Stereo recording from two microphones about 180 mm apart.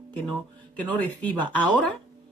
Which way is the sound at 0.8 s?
10° left (ahead or behind).